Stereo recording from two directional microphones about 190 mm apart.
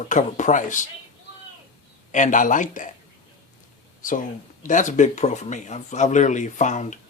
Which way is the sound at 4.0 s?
45° left (ahead or behind).